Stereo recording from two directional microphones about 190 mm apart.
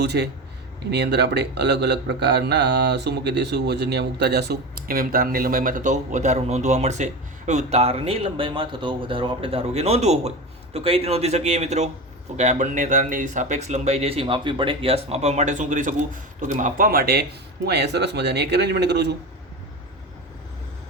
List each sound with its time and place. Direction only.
0.0 s a man's voice: 60° right (ahead or behind)